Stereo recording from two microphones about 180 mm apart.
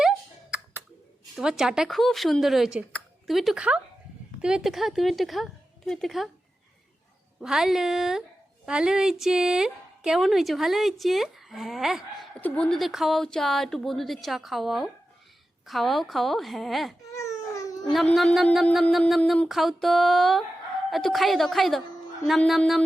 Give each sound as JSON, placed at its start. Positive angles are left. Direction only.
{"t": 1.4, "sound": "speech", "side_deg": -5}
{"t": 7.4, "sound": "speech", "side_deg": 0}
{"t": 17.1, "sound": "a sound", "side_deg": 15}
{"t": 17.9, "sound": "speech", "side_deg": 0}